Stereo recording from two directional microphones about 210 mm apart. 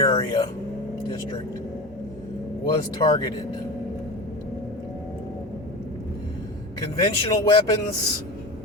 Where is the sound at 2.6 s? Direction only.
20° left (ahead or behind).